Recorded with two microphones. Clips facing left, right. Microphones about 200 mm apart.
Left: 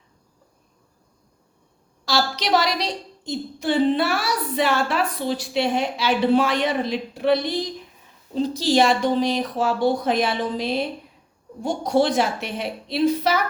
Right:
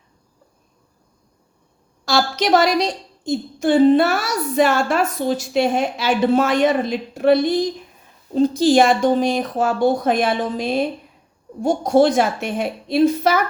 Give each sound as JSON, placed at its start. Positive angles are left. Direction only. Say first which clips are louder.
{"t": 2.0, "sound": "a woman's voice", "louder": "right 4 dB", "side_deg": -50}